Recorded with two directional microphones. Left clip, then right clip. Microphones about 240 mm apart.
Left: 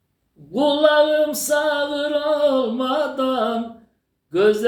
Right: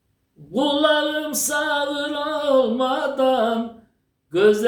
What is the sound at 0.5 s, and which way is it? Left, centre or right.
Speech, centre.